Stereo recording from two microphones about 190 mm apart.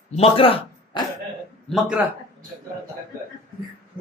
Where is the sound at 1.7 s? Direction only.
5° right (ahead or behind).